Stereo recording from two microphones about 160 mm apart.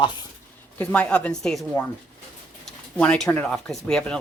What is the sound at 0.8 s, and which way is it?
Speech, 10° left (ahead or behind).